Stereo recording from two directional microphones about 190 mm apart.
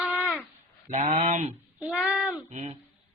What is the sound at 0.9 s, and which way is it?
Mantra, 40° right (ahead or behind).